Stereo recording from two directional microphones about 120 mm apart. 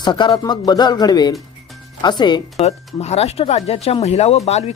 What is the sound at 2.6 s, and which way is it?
Speech, 65° left (ahead or behind).